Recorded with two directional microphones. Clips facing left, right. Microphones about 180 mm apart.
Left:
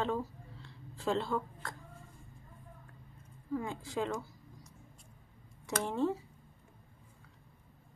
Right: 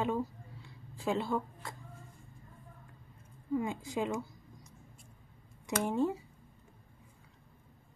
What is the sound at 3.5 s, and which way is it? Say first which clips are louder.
Speech: right 2 dB; 15° right (ahead or behind).